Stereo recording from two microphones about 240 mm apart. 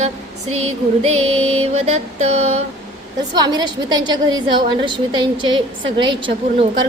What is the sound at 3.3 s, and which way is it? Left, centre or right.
A woman's voice, centre.